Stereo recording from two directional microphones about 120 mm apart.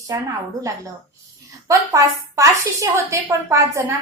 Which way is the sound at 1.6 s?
25° right (ahead or behind).